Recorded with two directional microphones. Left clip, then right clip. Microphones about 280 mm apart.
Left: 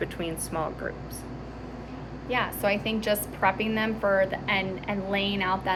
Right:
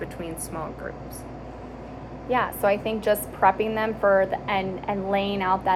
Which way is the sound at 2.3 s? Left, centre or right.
Centre.